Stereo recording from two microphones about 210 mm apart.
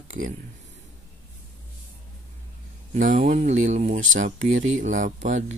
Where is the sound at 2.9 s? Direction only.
40° right (ahead or behind).